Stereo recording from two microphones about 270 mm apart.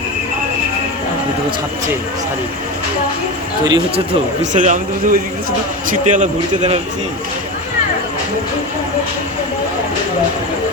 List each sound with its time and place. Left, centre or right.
3.6 s speech: centre
4.5 s speech: right